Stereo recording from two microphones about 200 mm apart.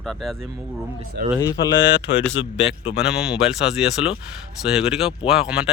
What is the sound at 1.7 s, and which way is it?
Speech, 70° left (ahead or behind).